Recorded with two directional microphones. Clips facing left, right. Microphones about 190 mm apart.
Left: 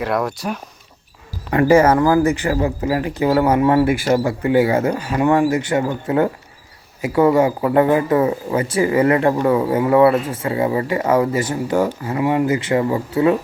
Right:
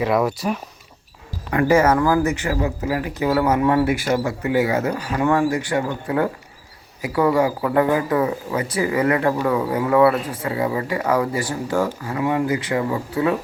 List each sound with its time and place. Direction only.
0.0 s speech: centre (ahead or behind)
1.5 s speech: 30° left (ahead or behind)